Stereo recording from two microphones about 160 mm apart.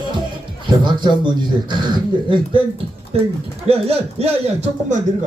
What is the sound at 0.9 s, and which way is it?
Speech, 30° right (ahead or behind).